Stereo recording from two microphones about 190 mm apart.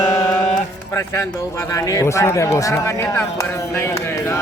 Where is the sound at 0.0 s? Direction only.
20° left (ahead or behind).